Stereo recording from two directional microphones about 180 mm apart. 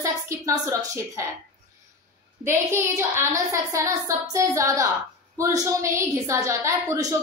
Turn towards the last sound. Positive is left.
turn(degrees=-15)  # may be behind; listen again after turning